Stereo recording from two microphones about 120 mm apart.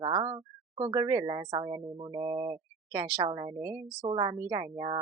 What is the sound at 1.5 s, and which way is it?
Speech, 45° right (ahead or behind).